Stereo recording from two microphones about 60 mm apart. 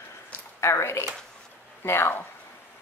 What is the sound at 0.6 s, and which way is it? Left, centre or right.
Speech, left.